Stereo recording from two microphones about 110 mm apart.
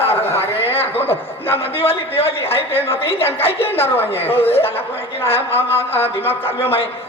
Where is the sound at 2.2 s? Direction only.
60° left (ahead or behind).